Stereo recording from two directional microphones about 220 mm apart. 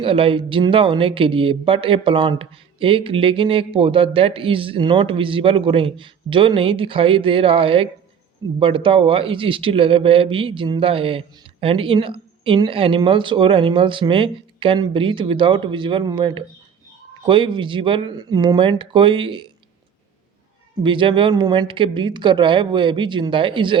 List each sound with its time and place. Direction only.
0.0 s a man's voice: 25° right (ahead or behind)
20.8 s a man's voice: 20° right (ahead or behind)